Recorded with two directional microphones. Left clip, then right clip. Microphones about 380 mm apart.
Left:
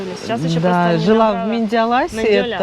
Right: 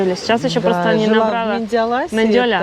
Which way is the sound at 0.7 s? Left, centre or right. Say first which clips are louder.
Left 1 dB; centre.